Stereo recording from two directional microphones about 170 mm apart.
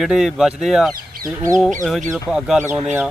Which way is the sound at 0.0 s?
Centre (ahead or behind).